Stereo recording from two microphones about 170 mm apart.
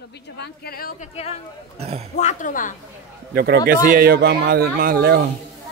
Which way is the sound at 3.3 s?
75° right (ahead or behind).